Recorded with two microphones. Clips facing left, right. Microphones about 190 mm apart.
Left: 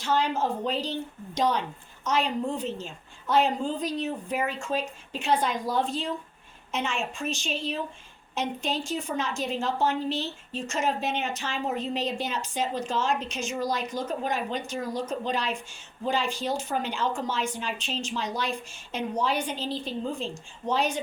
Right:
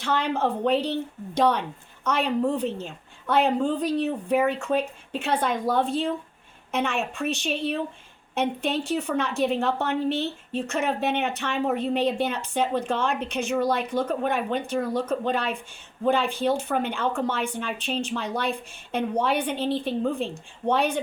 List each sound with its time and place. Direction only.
0.0 s a woman's voice: 60° right (ahead or behind)